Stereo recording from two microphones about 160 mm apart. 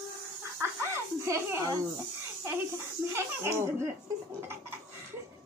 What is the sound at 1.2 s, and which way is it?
A woman's voice, 20° right (ahead or behind).